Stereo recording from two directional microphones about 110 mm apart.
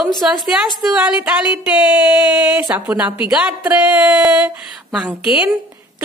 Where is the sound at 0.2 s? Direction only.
10° right (ahead or behind).